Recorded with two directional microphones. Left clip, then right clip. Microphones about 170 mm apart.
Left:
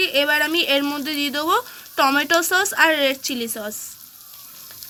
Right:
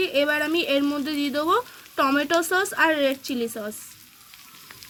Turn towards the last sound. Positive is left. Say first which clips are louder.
# left 2 dB
turn(degrees=5)  # may be behind; listen again after turning